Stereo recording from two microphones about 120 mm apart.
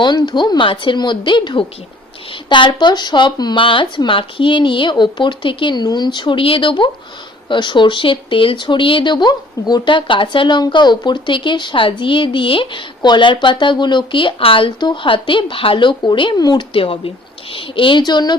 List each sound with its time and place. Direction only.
0.0 s speech: 40° left (ahead or behind)
16.7 s speech: 50° left (ahead or behind)